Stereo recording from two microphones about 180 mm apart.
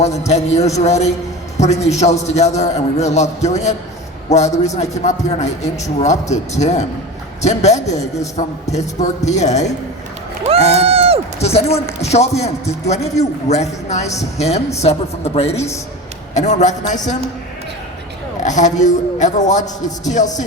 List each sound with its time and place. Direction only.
0.0 s speech: 40° left (ahead or behind)
9.2 s speech: 40° left (ahead or behind)
10.4 s crowd: 35° right (ahead or behind)
11.3 s speech: 35° left (ahead or behind)
18.4 s speech: 40° left (ahead or behind)